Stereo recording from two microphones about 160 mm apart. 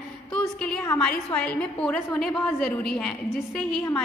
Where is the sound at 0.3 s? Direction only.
5° left (ahead or behind).